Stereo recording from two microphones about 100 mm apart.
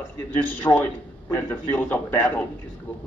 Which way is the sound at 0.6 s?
20° left (ahead or behind).